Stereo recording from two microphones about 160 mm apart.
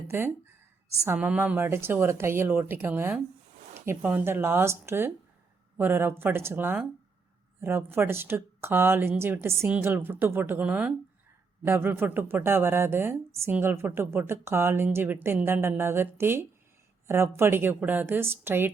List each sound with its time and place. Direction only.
1.0 s a woman's voice: 10° right (ahead or behind)